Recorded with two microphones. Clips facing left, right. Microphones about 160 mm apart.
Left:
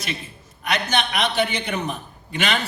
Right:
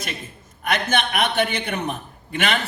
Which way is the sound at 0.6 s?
50° right (ahead or behind).